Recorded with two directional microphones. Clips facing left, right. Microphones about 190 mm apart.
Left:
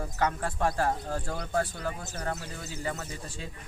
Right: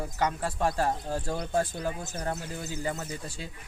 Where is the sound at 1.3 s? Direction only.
25° right (ahead or behind).